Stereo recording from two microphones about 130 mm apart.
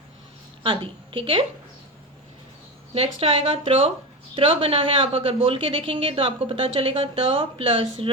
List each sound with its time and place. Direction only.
0.6 s a woman's voice: 40° right (ahead or behind)
2.9 s a woman's voice: 50° right (ahead or behind)